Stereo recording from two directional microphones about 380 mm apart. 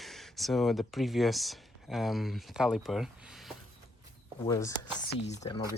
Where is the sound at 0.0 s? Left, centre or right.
Centre.